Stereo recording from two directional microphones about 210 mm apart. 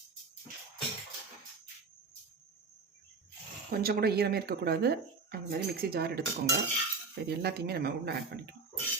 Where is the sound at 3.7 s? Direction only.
45° right (ahead or behind).